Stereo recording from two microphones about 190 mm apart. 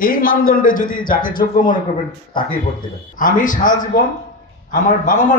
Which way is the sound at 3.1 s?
45° left (ahead or behind).